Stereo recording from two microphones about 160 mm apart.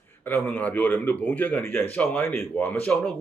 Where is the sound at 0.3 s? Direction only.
10° left (ahead or behind).